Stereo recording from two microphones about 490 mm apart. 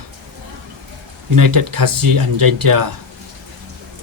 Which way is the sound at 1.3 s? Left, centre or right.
Right.